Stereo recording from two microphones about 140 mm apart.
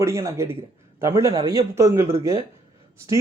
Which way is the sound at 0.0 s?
20° right (ahead or behind).